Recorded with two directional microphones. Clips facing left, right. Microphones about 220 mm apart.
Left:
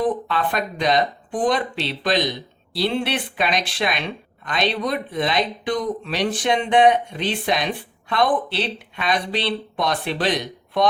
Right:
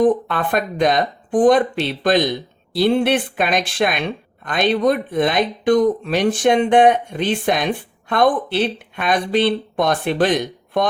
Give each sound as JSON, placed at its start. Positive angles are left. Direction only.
{"t": 0.0, "sound": "speech", "side_deg": -50}